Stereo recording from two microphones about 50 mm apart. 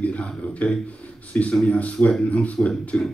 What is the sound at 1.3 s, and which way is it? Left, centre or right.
A man's voice, left.